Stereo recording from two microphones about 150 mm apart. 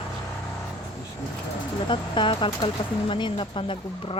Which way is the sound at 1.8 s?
35° left (ahead or behind).